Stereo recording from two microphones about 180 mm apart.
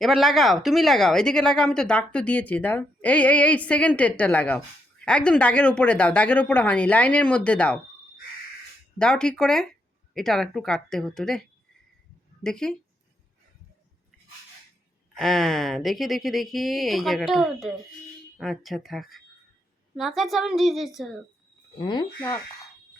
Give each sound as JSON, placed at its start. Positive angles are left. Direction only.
{"t": 0.0, "sound": "a woman's voice", "side_deg": 0}
{"t": 9.0, "sound": "speech", "side_deg": 5}
{"t": 15.1, "sound": "speech", "side_deg": 0}
{"t": 21.8, "sound": "speech", "side_deg": 25}